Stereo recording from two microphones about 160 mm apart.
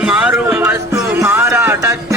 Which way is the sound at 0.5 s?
15° right (ahead or behind).